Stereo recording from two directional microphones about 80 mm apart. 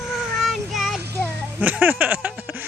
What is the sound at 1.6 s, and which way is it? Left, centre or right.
Speech, right.